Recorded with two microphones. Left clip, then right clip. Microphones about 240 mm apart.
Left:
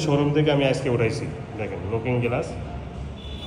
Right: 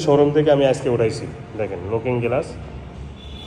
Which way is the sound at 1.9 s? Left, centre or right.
Right.